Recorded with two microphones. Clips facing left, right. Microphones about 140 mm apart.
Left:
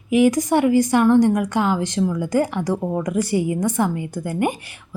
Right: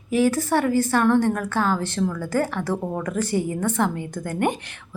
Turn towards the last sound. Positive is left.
turn(degrees=10)  # may be behind; listen again after turning